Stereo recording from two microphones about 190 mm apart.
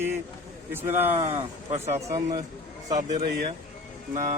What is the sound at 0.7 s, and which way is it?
Speech, 10° right (ahead or behind).